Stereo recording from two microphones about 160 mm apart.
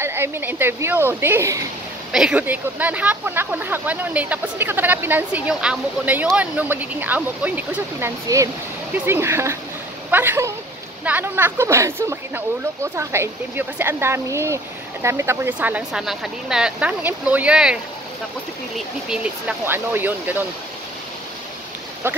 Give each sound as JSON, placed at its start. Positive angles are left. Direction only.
{"t": 0.0, "sound": "speech", "side_deg": -15}
{"t": 8.3, "sound": "speech", "side_deg": -20}
{"t": 19.0, "sound": "speech", "side_deg": -10}
{"t": 22.0, "sound": "speech", "side_deg": -15}